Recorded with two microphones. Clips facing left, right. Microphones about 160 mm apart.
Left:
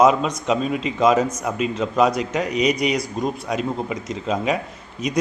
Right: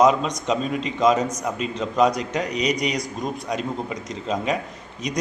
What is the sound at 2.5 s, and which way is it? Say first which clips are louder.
Speech: left 5 dB; 35° right (ahead or behind).